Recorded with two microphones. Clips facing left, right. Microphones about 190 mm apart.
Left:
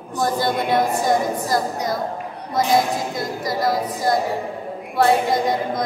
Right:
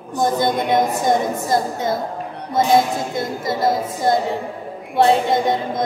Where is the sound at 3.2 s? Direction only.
25° right (ahead or behind).